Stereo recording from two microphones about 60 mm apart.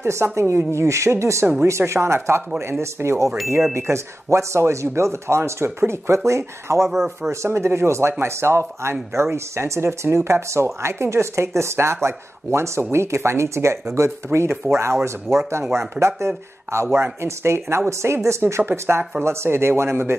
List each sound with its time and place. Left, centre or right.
0.0 s speech: right
18.7 s speech: right